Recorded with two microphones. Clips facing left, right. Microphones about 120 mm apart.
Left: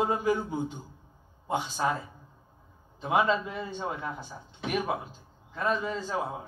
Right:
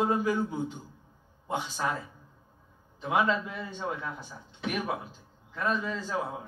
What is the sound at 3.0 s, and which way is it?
A man's voice, 20° left (ahead or behind).